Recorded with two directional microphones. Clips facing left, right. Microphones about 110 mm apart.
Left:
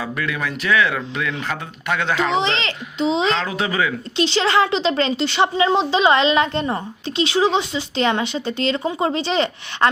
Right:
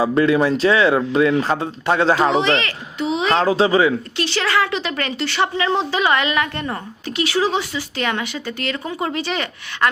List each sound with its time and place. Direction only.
0.0 s speech: 30° right (ahead or behind)
2.4 s speech: 20° left (ahead or behind)
3.4 s speech: 30° right (ahead or behind)
4.2 s speech: 20° left (ahead or behind)